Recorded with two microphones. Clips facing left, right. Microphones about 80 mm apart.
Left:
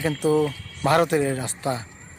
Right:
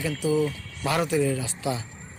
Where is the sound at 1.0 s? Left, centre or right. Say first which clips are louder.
Left 2 dB; left.